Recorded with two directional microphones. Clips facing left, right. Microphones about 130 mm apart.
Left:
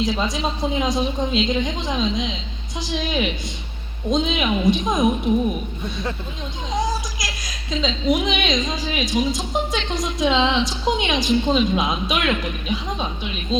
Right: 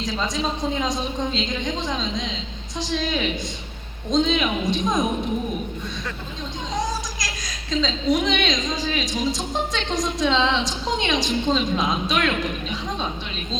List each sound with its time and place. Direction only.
0.0 s a woman's voice: 5° left (ahead or behind)
7.7 s a woman's voice: 5° left (ahead or behind)